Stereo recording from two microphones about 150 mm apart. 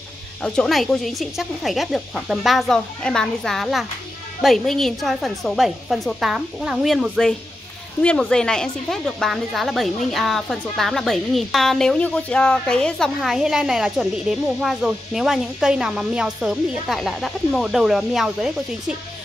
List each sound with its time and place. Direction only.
0.4 s speech: 5° left (ahead or behind)